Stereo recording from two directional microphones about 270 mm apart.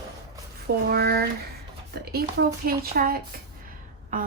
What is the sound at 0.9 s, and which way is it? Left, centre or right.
Speech, right.